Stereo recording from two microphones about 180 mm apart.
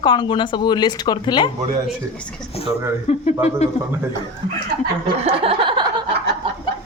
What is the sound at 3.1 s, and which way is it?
Speech, 35° left (ahead or behind).